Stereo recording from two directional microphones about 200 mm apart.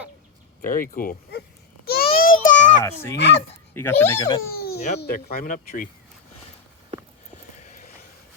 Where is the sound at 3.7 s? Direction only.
10° left (ahead or behind).